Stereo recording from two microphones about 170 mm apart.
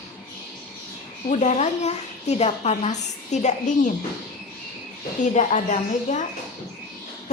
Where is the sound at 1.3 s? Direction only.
40° left (ahead or behind).